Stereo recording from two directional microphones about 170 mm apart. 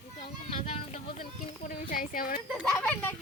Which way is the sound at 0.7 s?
50° left (ahead or behind).